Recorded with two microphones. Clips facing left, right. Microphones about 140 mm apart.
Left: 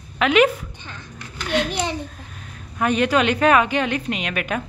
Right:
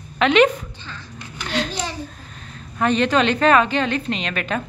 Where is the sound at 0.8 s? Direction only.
15° left (ahead or behind).